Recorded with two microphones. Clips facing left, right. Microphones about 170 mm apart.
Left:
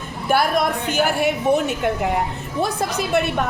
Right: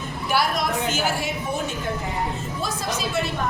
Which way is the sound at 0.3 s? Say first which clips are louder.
Left 5 dB; 55° left (ahead or behind).